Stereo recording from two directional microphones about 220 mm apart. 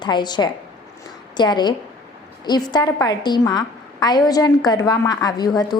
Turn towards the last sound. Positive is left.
turn(degrees=20)  # may be behind; listen again after turning